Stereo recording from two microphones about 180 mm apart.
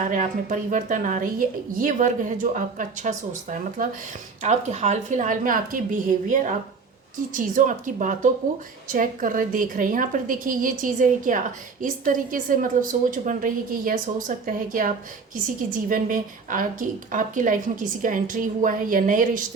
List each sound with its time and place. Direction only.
0.0 s a woman's voice: 45° right (ahead or behind)